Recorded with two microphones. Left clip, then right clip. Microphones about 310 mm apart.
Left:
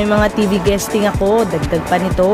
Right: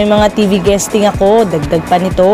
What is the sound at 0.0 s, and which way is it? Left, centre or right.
A woman's voice, centre.